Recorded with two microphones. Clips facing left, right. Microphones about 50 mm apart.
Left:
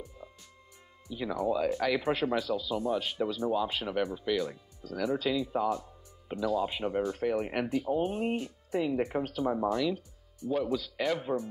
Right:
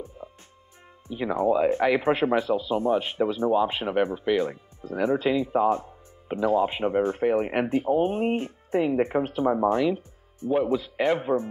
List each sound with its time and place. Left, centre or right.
0.0 s music: right
1.0 s speech: right